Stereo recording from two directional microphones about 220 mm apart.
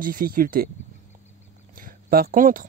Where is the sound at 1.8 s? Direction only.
40° right (ahead or behind).